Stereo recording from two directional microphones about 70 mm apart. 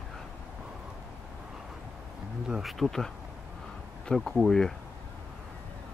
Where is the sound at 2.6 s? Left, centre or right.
Centre.